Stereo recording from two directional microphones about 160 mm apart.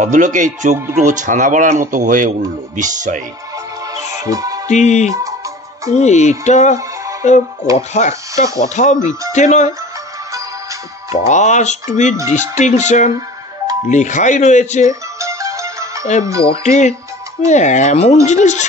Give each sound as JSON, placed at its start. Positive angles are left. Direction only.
{"t": 0.0, "sound": "speech", "side_deg": -50}
{"t": 4.2, "sound": "music", "side_deg": -20}
{"t": 4.6, "sound": "speech", "side_deg": 45}
{"t": 11.1, "sound": "speech", "side_deg": 45}
{"t": 14.9, "sound": "music", "side_deg": -20}
{"t": 16.6, "sound": "speech", "side_deg": 50}